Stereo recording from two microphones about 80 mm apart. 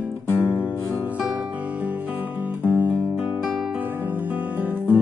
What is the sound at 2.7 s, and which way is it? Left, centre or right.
Guitar, right.